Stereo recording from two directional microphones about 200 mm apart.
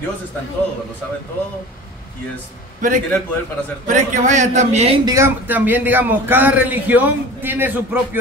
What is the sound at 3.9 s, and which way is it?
A man's voice, 40° right (ahead or behind).